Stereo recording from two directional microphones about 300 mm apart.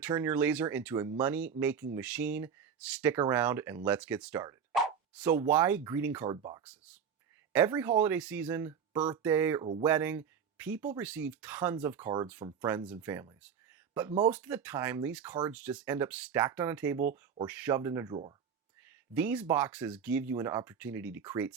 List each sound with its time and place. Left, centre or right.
0.0 s speech: centre
19.1 s speech: centre